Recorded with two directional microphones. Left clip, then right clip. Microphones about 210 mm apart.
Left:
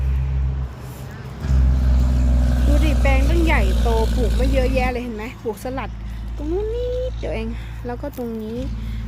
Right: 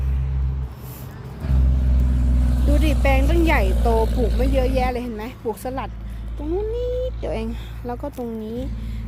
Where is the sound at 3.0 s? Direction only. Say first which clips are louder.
Right 2 dB; 25° right (ahead or behind).